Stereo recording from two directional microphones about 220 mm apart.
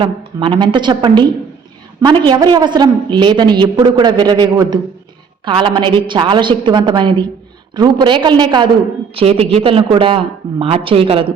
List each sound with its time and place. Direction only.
0.0 s a woman's voice: 20° right (ahead or behind)